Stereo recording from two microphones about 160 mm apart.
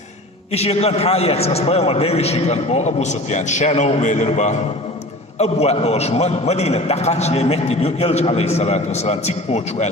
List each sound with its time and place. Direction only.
0.5 s a man's voice: 40° left (ahead or behind)